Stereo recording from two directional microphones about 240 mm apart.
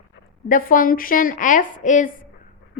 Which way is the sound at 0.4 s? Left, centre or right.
Left.